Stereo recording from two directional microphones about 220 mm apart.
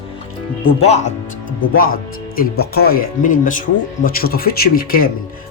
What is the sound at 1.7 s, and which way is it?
Speech, 40° left (ahead or behind).